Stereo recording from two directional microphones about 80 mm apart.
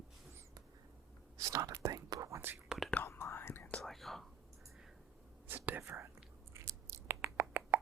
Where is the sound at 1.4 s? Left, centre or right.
Right.